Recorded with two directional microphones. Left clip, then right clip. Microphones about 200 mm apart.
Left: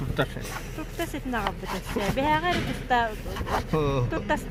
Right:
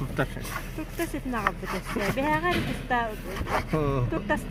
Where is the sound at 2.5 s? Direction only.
45° right (ahead or behind).